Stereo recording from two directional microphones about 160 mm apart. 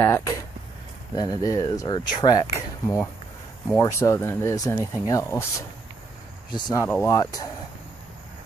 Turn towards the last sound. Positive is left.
turn(degrees=20)  # may be behind; listen again after turning